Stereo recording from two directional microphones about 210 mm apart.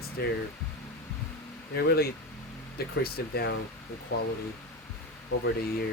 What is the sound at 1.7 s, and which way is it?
Speech, 50° left (ahead or behind).